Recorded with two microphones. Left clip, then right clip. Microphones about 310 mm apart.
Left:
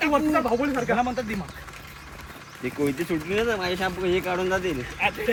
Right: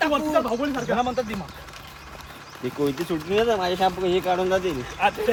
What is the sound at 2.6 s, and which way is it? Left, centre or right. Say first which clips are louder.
Speech: right 1 dB; centre.